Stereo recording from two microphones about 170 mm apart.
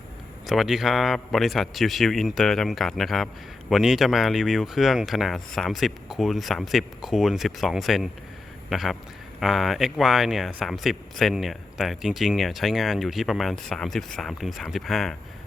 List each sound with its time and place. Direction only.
0.4 s speech: centre (ahead or behind)